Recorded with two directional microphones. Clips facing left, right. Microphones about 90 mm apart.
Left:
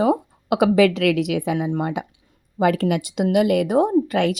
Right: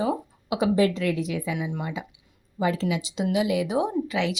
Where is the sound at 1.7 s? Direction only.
55° left (ahead or behind).